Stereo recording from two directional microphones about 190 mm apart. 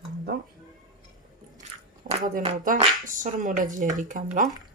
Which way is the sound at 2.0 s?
45° right (ahead or behind).